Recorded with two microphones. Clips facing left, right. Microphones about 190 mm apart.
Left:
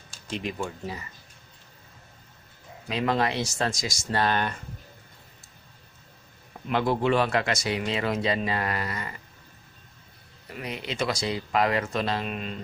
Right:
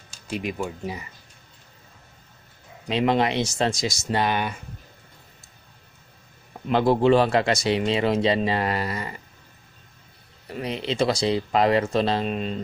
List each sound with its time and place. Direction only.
0.3 s speech: 10° right (ahead or behind)
2.9 s speech: 20° right (ahead or behind)
6.7 s speech: 30° right (ahead or behind)
10.5 s speech: 30° right (ahead or behind)